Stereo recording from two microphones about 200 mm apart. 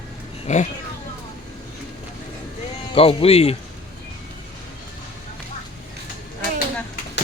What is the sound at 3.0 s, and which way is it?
Speech, 30° left (ahead or behind).